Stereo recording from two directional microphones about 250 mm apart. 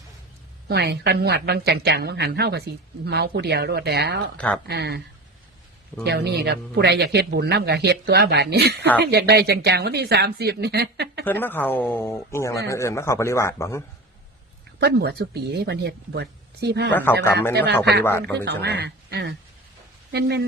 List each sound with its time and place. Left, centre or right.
0.7 s speech: right
4.4 s speech: centre
4.7 s speech: right
6.1 s speech: right
11.3 s speech: centre
14.8 s speech: right
16.9 s speech: centre
17.5 s speech: right
18.0 s speech: centre
18.4 s speech: right